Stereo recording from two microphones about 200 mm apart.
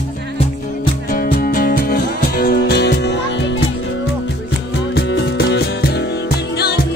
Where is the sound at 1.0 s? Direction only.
45° left (ahead or behind).